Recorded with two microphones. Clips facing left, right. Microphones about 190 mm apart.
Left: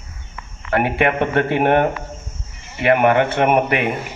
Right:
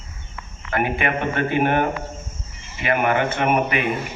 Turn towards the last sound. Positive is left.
turn(degrees=60)  # may be behind; listen again after turning